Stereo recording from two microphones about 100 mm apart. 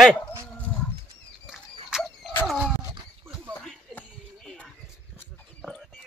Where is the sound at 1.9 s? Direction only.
Centre (ahead or behind).